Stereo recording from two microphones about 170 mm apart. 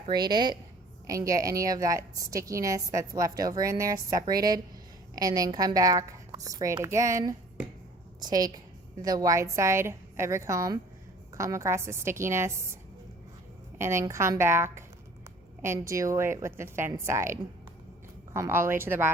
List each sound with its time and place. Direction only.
0.1 s a woman's voice: 25° right (ahead or behind)
13.7 s a woman's voice: 15° right (ahead or behind)
18.3 s a woman's voice: 15° right (ahead or behind)